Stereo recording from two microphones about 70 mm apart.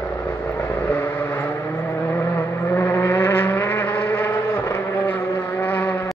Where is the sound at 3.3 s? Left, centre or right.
Left.